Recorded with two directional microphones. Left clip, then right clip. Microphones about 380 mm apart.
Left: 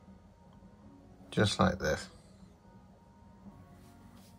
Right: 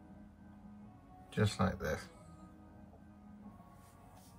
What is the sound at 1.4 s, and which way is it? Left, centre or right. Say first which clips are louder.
Speech: left 7 dB; centre.